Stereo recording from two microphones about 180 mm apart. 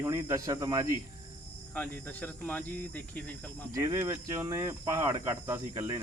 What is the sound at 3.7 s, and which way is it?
Speech, 15° right (ahead or behind).